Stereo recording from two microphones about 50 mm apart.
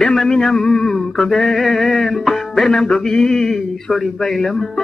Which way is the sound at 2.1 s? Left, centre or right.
Centre.